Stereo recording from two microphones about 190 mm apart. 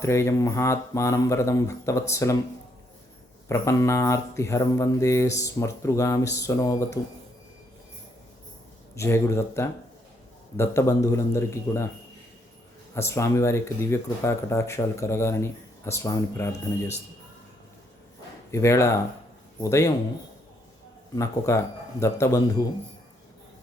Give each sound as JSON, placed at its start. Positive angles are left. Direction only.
{"t": 0.0, "sound": "speech", "side_deg": 15}
{"t": 3.5, "sound": "speech", "side_deg": 15}
{"t": 9.0, "sound": "speech", "side_deg": 15}
{"t": 12.9, "sound": "speech", "side_deg": 15}
{"t": 18.5, "sound": "speech", "side_deg": 15}
{"t": 21.2, "sound": "speech", "side_deg": 15}